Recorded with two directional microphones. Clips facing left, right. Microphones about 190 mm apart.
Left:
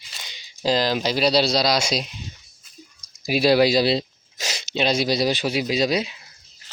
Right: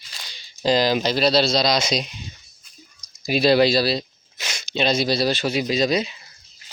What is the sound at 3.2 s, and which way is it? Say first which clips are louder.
Speech: even; 10° left (ahead or behind).